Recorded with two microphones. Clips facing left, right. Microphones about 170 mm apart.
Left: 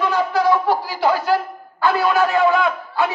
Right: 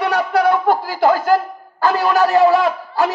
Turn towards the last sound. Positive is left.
turn(degrees=-40)  # may be behind; listen again after turning